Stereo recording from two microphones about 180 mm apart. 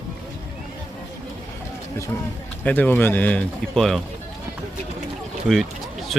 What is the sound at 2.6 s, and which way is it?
Speech, 10° left (ahead or behind).